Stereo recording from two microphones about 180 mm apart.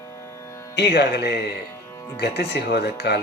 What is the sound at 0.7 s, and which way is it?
Speech, 65° left (ahead or behind).